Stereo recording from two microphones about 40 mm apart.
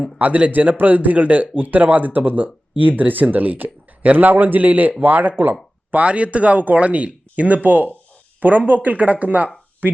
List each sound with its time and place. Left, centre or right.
0.2 s a man's voice: right
9.8 s a man's voice: right